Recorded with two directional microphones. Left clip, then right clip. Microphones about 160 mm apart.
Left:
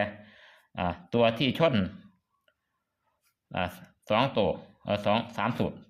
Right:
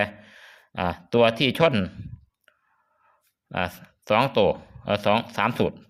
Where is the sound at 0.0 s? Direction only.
25° right (ahead or behind).